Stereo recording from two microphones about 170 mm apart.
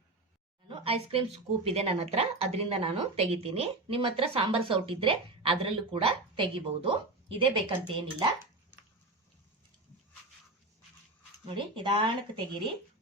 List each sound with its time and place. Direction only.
0.7 s a woman's voice: 35° right (ahead or behind)
11.4 s speech: 30° right (ahead or behind)